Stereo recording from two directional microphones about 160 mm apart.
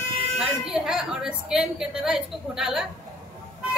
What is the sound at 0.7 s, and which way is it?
A woman's voice, 5° right (ahead or behind).